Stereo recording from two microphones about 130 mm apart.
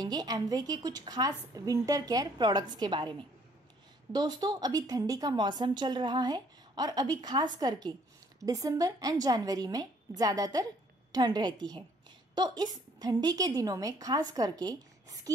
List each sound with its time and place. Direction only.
0.0 s a woman's voice: 30° right (ahead or behind)